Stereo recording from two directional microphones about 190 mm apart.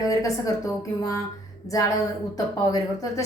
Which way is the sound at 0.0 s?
15° left (ahead or behind).